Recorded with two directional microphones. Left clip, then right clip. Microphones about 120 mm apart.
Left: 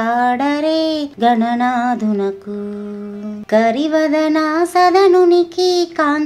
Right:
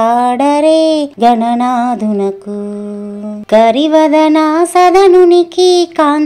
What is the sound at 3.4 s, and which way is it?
Music, 45° right (ahead or behind).